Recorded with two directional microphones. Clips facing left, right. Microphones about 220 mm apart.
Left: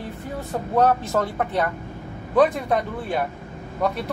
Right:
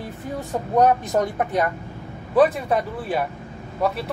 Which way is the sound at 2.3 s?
5° right (ahead or behind).